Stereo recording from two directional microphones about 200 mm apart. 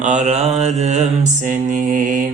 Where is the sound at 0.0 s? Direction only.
35° right (ahead or behind).